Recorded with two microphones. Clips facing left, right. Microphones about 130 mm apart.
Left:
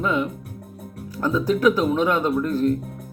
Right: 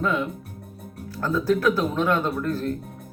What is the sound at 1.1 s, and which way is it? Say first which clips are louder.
A man's voice: left 1 dB; 15° left (ahead or behind).